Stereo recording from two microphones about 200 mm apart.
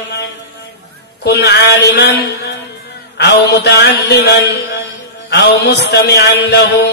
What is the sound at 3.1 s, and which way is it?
A man's voice, 55° left (ahead or behind).